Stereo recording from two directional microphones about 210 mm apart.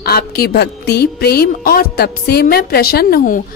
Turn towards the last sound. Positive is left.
turn(degrees=45)  # may be behind; listen again after turning